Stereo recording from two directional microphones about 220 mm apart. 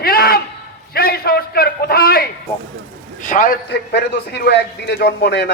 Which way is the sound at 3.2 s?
35° left (ahead or behind).